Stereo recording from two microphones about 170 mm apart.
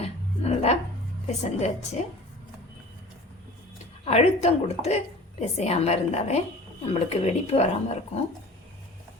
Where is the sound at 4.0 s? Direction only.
40° left (ahead or behind).